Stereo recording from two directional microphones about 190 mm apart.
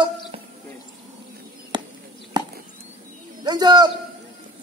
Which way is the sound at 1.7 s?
25° right (ahead or behind).